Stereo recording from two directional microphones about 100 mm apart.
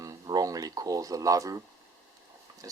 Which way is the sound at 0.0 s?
40° right (ahead or behind).